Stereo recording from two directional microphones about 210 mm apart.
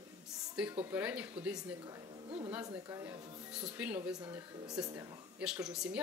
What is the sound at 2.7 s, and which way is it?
Speech, 15° right (ahead or behind).